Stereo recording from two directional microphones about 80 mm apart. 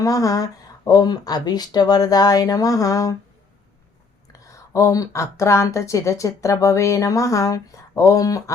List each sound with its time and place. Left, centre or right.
0.0 s speech: left
4.3 s a woman's voice: left